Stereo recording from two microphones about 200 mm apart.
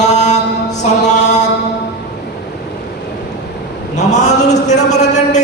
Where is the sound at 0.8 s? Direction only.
35° left (ahead or behind).